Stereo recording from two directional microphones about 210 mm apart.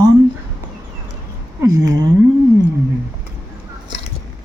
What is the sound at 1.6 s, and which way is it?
Speech, 15° right (ahead or behind).